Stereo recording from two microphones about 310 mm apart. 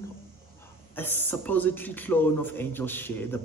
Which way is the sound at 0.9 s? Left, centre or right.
Centre.